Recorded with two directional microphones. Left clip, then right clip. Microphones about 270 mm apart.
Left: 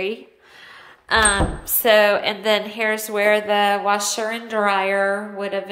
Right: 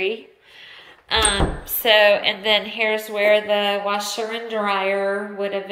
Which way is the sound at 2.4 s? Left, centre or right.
Left.